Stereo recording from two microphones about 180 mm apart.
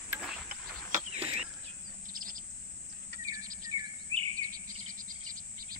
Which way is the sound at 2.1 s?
50° right (ahead or behind).